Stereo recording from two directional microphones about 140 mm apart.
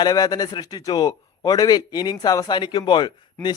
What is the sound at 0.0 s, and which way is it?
A man's voice, 30° left (ahead or behind).